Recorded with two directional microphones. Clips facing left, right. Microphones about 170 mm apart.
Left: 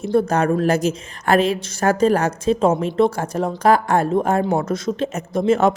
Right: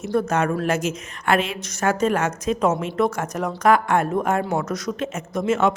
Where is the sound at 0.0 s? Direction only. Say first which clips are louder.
Left 4 dB; 30° left (ahead or behind).